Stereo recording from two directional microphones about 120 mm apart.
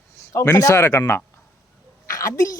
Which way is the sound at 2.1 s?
25° left (ahead or behind).